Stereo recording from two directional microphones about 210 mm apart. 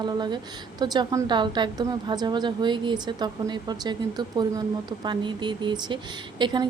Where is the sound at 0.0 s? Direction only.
20° right (ahead or behind).